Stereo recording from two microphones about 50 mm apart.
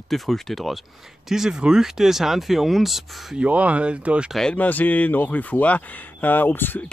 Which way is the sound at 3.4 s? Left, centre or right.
Right.